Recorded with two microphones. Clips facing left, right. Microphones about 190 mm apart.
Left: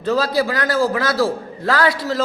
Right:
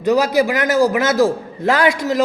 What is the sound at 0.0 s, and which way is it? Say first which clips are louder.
A man's voice: right 4 dB; 15° right (ahead or behind).